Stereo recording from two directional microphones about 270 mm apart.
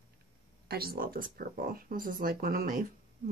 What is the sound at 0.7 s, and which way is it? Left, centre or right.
Speech, right.